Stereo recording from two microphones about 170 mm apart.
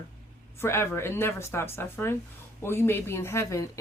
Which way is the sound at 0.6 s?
15° left (ahead or behind).